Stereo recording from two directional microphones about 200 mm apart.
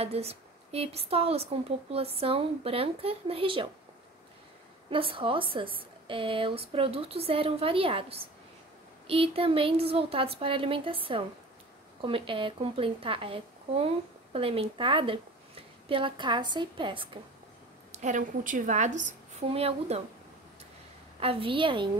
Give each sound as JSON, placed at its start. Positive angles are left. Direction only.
{"t": 0.0, "sound": "a woman's voice", "side_deg": -30}
{"t": 4.8, "sound": "a woman's voice", "side_deg": -25}
{"t": 17.9, "sound": "a woman's voice", "side_deg": -40}
{"t": 21.2, "sound": "a woman's voice", "side_deg": -25}